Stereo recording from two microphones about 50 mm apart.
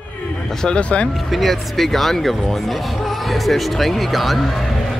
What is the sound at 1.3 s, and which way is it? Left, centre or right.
Speech, centre.